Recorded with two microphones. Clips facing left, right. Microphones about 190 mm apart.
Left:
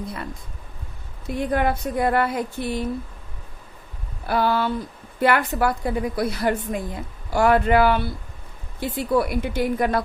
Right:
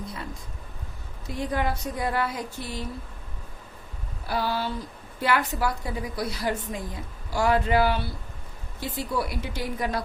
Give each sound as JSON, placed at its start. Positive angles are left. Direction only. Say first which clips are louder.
{"t": 1.5, "sound": "a woman's voice", "louder": "left 5 dB", "side_deg": 55}
{"t": 4.3, "sound": "a woman's voice", "louder": "left 6 dB", "side_deg": 55}